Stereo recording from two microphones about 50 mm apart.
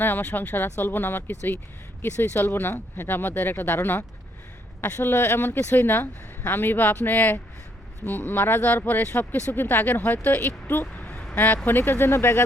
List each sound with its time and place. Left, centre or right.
0.0 s speech: left
5.0 s speech: left
10.9 s vehicle: left
11.3 s speech: left